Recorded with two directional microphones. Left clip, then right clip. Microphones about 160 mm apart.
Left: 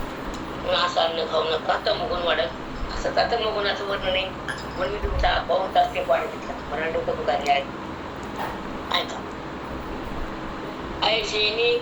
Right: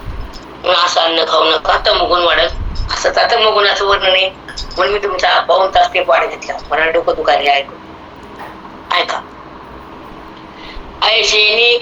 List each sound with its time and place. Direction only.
0.6 s a woman's voice: 55° right (ahead or behind)
8.9 s speech: 55° right (ahead or behind)
11.0 s a woman's voice: 55° right (ahead or behind)